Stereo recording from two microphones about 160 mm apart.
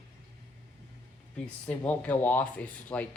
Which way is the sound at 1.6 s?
5° left (ahead or behind).